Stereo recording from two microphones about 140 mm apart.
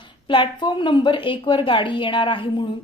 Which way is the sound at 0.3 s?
35° left (ahead or behind).